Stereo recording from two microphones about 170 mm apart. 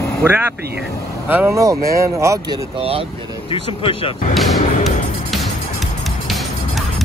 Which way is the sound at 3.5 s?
30° left (ahead or behind).